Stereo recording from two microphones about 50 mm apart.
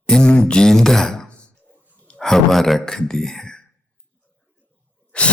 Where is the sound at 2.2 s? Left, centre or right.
Centre.